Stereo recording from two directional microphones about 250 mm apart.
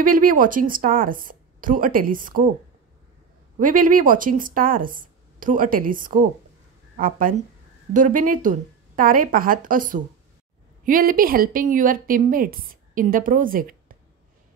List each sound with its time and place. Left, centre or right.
0.0 s a woman's voice: right
3.5 s a woman's voice: right